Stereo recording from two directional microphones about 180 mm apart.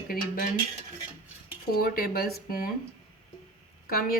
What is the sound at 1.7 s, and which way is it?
Speech, 55° left (ahead or behind).